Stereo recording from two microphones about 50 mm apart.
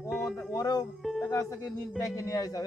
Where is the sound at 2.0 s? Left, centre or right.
Left.